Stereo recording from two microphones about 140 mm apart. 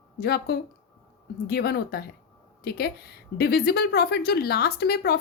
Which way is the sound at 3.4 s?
90° left.